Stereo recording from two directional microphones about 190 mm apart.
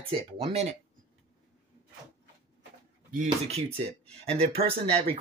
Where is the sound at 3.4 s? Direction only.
35° right (ahead or behind).